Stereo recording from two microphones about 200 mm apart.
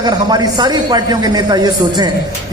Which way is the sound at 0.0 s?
20° right (ahead or behind).